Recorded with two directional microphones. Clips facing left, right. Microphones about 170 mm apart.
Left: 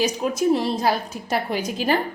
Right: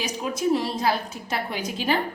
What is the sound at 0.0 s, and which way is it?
A woman's voice, 40° left (ahead or behind).